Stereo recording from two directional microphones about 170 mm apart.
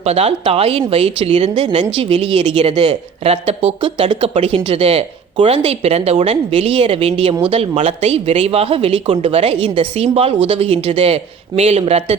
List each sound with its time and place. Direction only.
0.0 s speech: 40° right (ahead or behind)